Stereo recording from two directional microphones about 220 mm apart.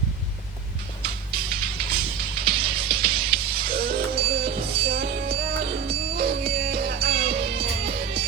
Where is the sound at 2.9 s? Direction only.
45° right (ahead or behind).